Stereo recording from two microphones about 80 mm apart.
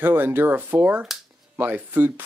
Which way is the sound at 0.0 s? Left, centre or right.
Right.